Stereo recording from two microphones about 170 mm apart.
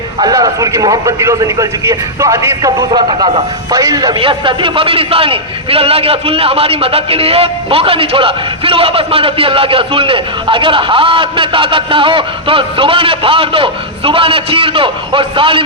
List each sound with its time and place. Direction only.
0.2 s a man's voice: 20° right (ahead or behind)